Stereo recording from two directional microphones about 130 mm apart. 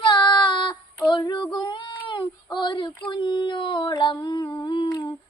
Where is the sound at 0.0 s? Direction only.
40° left (ahead or behind).